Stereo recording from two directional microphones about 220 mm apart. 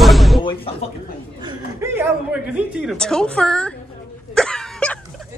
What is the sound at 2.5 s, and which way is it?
A woman's voice, 5° right (ahead or behind).